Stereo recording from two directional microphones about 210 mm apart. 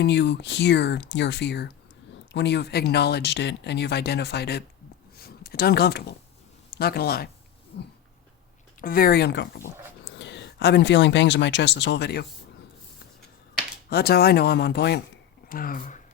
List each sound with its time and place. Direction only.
0.0 s speech: 55° left (ahead or behind)
7.7 s dog: 55° left (ahead or behind)
8.8 s speech: 45° left (ahead or behind)
13.9 s speech: 50° left (ahead or behind)
15.4 s speech: 45° left (ahead or behind)